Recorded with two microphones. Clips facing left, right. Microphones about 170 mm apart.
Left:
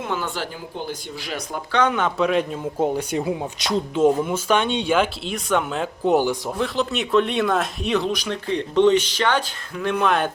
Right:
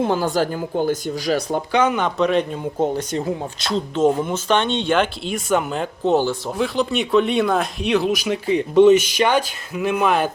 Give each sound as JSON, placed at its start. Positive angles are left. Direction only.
{"t": 0.0, "sound": "speech", "side_deg": -35}
{"t": 1.7, "sound": "a man's voice", "side_deg": -5}
{"t": 6.1, "sound": "speech", "side_deg": 15}
{"t": 6.6, "sound": "speech", "side_deg": 0}